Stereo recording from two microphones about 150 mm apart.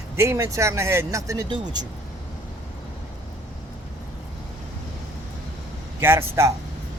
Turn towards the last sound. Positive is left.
turn(degrees=-20)  # may be behind; listen again after turning